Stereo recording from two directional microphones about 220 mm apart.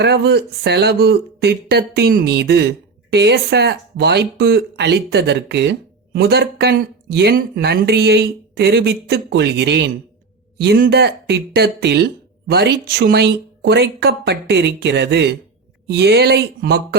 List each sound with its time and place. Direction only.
0.0 s speech: 50° right (ahead or behind)